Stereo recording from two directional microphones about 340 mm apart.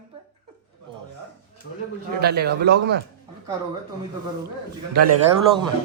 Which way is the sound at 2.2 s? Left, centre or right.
Right.